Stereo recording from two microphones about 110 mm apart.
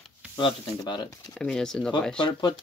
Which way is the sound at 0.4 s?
45° left (ahead or behind).